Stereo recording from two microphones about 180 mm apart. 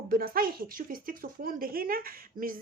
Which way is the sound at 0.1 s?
55° right (ahead or behind).